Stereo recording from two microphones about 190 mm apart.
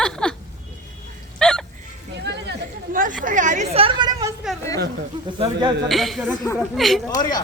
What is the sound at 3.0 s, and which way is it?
Chatter, 45° right (ahead or behind).